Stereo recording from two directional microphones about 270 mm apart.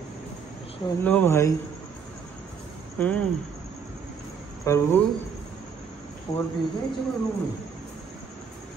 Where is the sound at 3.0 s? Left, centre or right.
Centre.